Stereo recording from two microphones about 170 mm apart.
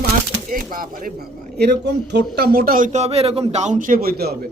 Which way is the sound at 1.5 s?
70° right (ahead or behind).